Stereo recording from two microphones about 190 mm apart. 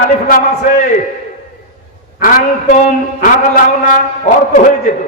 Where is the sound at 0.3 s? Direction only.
45° left (ahead or behind).